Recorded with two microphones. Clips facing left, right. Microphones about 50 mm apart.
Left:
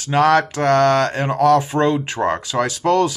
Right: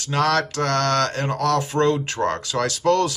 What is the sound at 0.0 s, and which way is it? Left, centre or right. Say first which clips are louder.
Speech: left 6 dB; centre.